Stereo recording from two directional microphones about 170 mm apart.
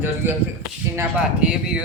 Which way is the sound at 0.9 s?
5° right (ahead or behind).